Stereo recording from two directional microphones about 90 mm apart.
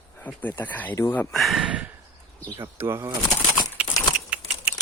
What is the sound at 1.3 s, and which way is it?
Speech, centre (ahead or behind).